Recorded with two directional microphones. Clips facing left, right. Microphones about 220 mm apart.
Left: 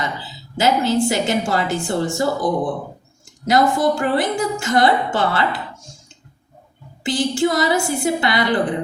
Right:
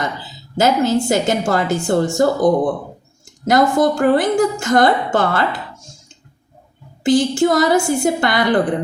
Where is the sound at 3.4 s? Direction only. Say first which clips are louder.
Right 2 dB; 50° right (ahead or behind).